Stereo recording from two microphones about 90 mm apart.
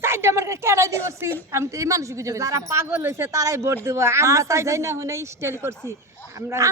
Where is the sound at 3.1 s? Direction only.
35° right (ahead or behind).